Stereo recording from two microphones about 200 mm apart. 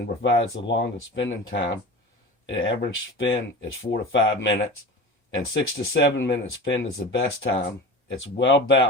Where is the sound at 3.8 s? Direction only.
70° left (ahead or behind).